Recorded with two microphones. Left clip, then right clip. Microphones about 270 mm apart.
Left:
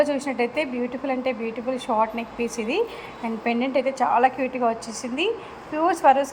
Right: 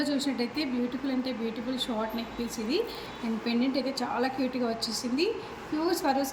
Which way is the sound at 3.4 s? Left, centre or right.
Centre.